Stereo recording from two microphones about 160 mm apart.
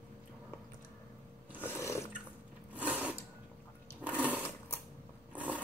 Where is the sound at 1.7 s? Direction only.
15° left (ahead or behind).